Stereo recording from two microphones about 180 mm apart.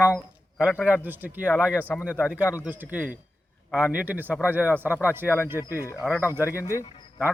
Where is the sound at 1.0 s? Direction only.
10° right (ahead or behind).